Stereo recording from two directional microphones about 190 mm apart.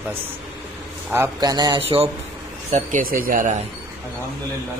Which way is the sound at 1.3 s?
20° right (ahead or behind).